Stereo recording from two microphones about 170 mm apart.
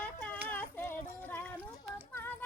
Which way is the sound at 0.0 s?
10° left (ahead or behind).